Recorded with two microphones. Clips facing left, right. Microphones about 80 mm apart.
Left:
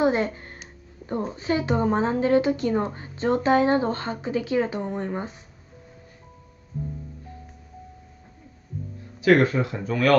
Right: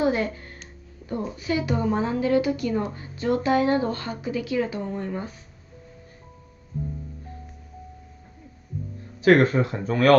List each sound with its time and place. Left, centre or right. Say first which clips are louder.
0.0 s a sound: left 1 dB; left
1.0 s a woman's voice: left 2 dB; left
9.2 s speech: right 1 dB; right